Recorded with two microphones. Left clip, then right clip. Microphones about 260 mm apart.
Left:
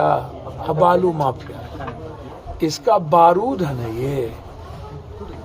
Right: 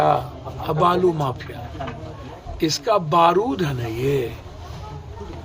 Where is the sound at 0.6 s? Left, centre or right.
Right.